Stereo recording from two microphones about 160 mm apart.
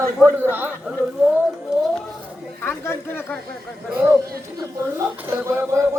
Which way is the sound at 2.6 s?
15° left (ahead or behind).